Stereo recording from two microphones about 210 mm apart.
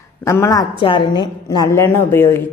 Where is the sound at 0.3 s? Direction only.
15° left (ahead or behind).